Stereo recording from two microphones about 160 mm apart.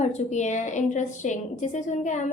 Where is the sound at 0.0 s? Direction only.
45° left (ahead or behind).